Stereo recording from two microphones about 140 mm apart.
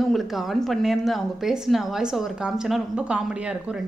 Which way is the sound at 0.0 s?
Centre (ahead or behind).